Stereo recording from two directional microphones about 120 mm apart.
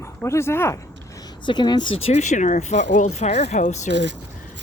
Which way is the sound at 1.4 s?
40° left (ahead or behind).